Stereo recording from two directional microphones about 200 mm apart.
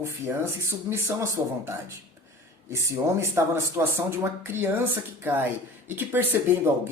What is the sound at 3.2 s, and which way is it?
Speech, 15° right (ahead or behind).